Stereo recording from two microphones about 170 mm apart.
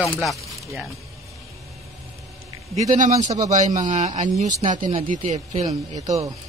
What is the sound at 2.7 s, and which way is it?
A man's voice, 45° right (ahead or behind).